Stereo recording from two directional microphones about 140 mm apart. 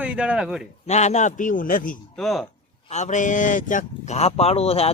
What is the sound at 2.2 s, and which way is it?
Speech, centre (ahead or behind).